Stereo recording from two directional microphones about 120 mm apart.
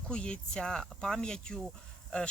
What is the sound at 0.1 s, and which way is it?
Speech, 10° left (ahead or behind).